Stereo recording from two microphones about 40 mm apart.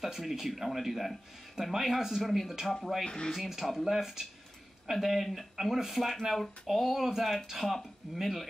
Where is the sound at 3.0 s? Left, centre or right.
Centre.